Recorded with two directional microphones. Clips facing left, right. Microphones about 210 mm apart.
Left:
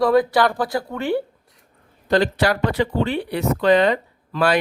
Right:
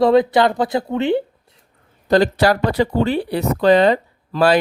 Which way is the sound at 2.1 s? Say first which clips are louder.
Right 4 dB; 40° right (ahead or behind).